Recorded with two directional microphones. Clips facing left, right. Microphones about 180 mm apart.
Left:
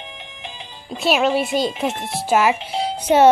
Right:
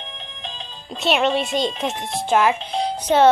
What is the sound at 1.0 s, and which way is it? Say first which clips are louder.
A child's voice: left 1 dB; 5° left (ahead or behind).